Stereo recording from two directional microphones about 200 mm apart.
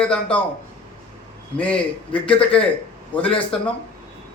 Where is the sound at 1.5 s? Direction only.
5° left (ahead or behind).